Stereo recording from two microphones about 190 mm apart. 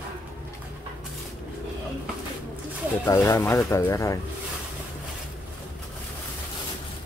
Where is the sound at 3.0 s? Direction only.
10° left (ahead or behind).